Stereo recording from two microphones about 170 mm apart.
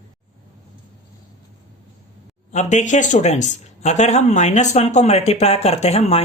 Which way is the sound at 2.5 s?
45° left (ahead or behind).